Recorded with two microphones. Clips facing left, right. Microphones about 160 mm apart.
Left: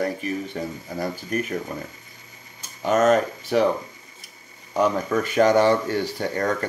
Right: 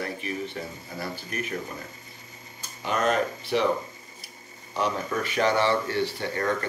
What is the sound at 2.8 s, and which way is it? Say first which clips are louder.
Speech: left 7 dB; 45° left (ahead or behind).